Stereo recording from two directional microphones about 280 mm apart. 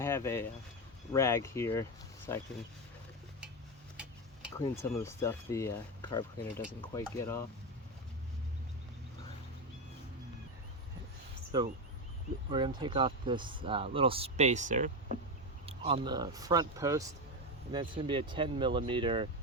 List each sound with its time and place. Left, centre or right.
0.0 s speech: centre
4.8 s speech: centre
11.5 s speech: centre